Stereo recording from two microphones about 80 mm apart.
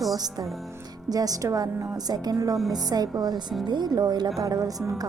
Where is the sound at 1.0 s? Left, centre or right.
Right.